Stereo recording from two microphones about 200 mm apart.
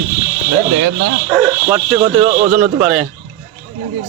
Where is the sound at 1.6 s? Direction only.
10° right (ahead or behind).